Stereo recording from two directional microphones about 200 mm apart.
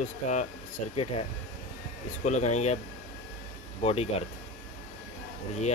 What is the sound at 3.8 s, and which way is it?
Speech, 30° left (ahead or behind).